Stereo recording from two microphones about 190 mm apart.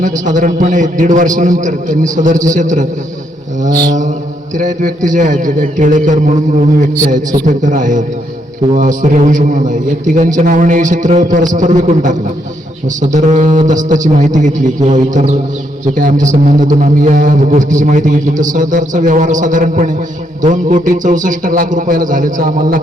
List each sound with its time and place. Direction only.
0.0 s a man's voice: 40° right (ahead or behind)
4.5 s a man's voice: 40° right (ahead or behind)